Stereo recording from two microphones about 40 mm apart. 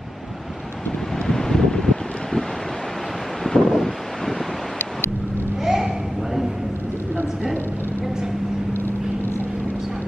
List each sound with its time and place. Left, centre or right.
1.1 s wind: centre
3.4 s wind noise: centre
5.6 s a sound: centre
8.7 s vehicle: left